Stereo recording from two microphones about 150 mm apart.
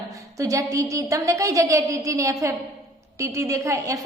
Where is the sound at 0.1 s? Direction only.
20° right (ahead or behind).